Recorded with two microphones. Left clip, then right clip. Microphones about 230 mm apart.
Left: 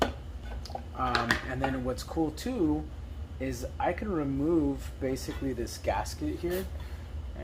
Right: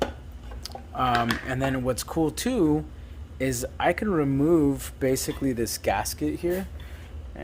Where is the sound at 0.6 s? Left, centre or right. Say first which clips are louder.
Right 6 dB; right.